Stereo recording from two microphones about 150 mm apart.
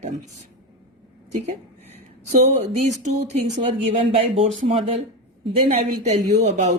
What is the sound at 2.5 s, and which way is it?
Speech, 50° right (ahead or behind).